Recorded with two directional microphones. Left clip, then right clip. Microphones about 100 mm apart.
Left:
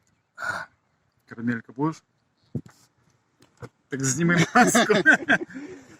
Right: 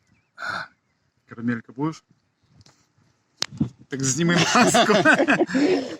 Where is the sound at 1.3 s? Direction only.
5° right (ahead or behind).